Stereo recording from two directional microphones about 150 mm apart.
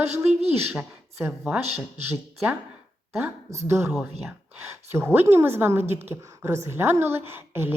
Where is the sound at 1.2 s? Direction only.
15° right (ahead or behind).